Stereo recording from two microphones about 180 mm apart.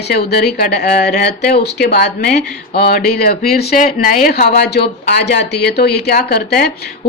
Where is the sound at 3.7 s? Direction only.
45° left (ahead or behind).